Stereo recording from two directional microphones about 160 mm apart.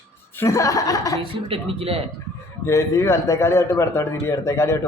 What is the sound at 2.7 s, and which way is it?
A man's voice, 20° left (ahead or behind).